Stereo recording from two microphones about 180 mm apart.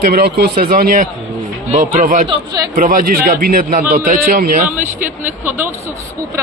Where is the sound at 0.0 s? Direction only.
55° right (ahead or behind).